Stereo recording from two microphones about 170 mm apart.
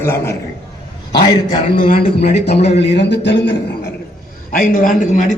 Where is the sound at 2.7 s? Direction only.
80° left.